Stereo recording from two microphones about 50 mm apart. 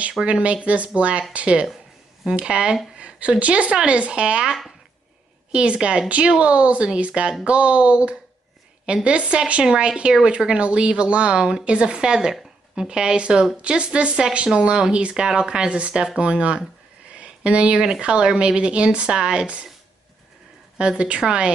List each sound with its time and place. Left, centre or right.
0.2 s a woman's voice: right
17.1 s a sound: right
18.0 s speech: centre
20.7 s speech: centre